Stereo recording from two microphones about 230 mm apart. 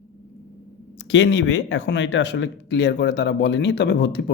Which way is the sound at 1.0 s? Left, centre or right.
Left.